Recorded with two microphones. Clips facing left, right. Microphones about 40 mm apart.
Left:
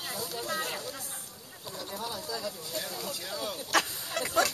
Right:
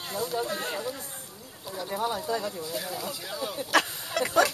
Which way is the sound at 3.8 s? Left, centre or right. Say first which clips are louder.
Right 2 dB; right.